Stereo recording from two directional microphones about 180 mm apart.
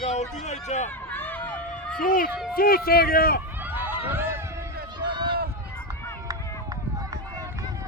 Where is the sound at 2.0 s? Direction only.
50° left (ahead or behind).